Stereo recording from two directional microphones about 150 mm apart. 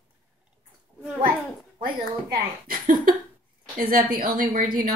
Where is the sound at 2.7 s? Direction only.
65° right (ahead or behind).